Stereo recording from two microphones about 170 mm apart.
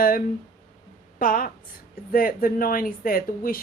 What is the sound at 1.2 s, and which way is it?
Speech, 55° left (ahead or behind).